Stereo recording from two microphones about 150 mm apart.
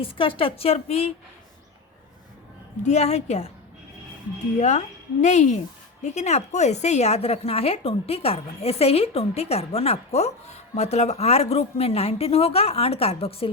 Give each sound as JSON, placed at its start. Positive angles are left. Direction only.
{"t": 0.0, "sound": "a woman's voice", "side_deg": 35}
{"t": 2.8, "sound": "a woman's voice", "side_deg": 45}
{"t": 5.2, "sound": "a woman's voice", "side_deg": 50}